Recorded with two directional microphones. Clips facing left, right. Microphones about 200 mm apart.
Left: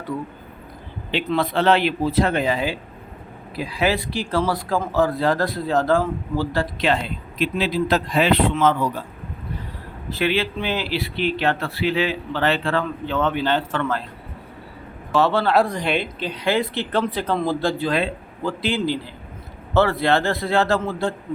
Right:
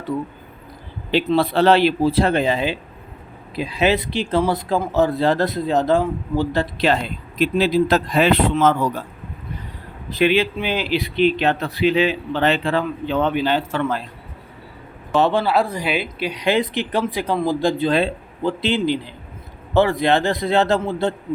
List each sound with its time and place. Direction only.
1.3 s a man's voice: 35° right (ahead or behind)
6.7 s a man's voice: 40° right (ahead or behind)
10.1 s speech: 15° right (ahead or behind)
15.1 s speech: 15° right (ahead or behind)